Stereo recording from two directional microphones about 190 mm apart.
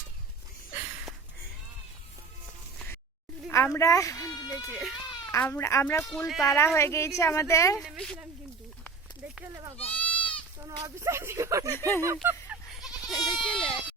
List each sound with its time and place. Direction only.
0.8 s a sound: 10° right (ahead or behind)
3.5 s speech: 15° left (ahead or behind)
4.7 s a woman's voice: centre (ahead or behind)
5.3 s speech: 15° left (ahead or behind)
7.8 s a woman's voice: centre (ahead or behind)
9.2 s speech: 10° right (ahead or behind)
9.7 s goat: 10° left (ahead or behind)
10.6 s speech: 15° right (ahead or behind)
12.0 s goat: 10° right (ahead or behind)
13.1 s goat: 25° left (ahead or behind)
13.4 s a sound: 5° left (ahead or behind)